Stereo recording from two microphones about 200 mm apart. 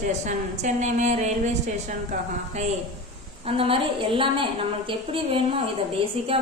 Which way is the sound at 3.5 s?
30° right (ahead or behind).